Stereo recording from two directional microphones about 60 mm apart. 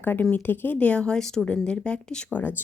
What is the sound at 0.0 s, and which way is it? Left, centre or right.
Speech, left.